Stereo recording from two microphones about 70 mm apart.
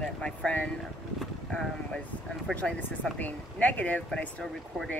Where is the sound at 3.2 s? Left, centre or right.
Left.